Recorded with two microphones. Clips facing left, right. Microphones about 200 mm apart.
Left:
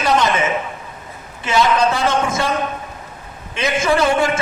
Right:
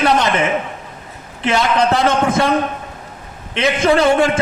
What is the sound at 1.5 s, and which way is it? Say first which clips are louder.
Speech: even; 65° right (ahead or behind).